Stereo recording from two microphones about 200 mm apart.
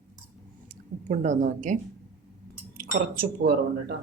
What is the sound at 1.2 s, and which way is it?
Speech, 40° right (ahead or behind).